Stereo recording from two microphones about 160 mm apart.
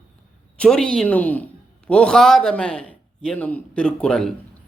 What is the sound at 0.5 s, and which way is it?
A woman's voice, 5° left (ahead or behind).